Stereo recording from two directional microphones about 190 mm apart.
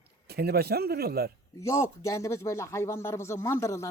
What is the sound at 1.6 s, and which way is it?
Speech, 15° left (ahead or behind).